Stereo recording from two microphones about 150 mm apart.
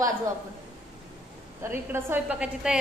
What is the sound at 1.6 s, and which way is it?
A woman's voice, 15° right (ahead or behind).